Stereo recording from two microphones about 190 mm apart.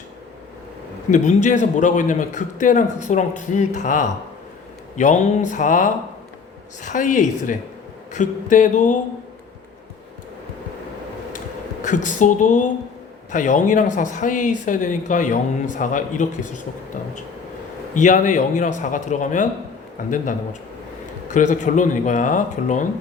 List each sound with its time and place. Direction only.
1.1 s speech: 40° left (ahead or behind)
11.8 s speech: 40° left (ahead or behind)
17.9 s a man's voice: 40° left (ahead or behind)